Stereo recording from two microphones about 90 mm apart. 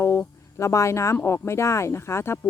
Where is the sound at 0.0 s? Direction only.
30° left (ahead or behind).